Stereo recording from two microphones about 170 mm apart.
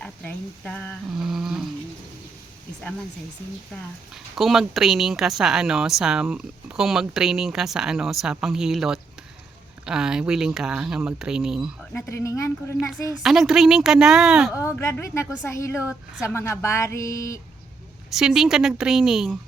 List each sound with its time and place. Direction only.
0.0 s speech: 5° left (ahead or behind)
3.8 s speech: centre (ahead or behind)
11.9 s a woman's voice: 15° left (ahead or behind)
12.9 s speech: centre (ahead or behind)
14.5 s a woman's voice: 15° left (ahead or behind)
15.8 s speech: 5° right (ahead or behind)
16.2 s a woman's voice: 15° left (ahead or behind)
18.1 s speech: 5° right (ahead or behind)